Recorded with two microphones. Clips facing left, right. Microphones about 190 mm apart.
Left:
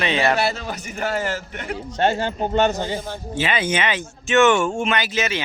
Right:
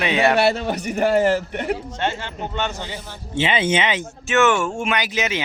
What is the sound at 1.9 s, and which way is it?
Speech, 40° left (ahead or behind).